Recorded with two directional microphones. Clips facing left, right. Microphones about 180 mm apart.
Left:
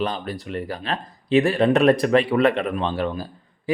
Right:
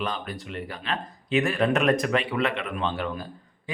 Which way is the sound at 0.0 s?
35° left (ahead or behind).